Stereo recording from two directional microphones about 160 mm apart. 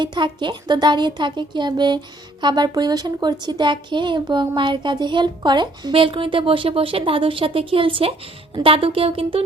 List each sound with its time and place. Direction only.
0.0 s a woman's voice: 30° right (ahead or behind)